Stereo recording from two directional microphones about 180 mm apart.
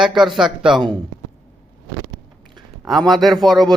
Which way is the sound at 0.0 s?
Centre (ahead or behind).